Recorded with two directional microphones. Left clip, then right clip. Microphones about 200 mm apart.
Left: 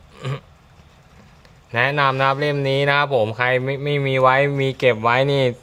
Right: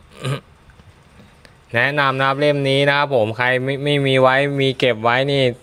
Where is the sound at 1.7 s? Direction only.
20° right (ahead or behind).